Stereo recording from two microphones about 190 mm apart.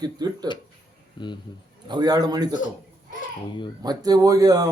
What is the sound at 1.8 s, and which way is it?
Speech, 20° right (ahead or behind).